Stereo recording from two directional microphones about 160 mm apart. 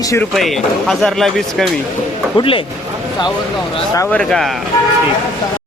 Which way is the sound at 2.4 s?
35° left (ahead or behind).